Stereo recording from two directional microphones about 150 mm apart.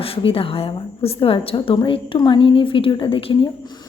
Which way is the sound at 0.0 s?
40° left (ahead or behind).